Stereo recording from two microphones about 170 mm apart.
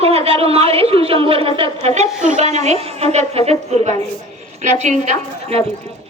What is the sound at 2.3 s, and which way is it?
A woman's voice, 40° right (ahead or behind).